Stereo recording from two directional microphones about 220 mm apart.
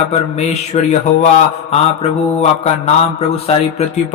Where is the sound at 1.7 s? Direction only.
30° left (ahead or behind).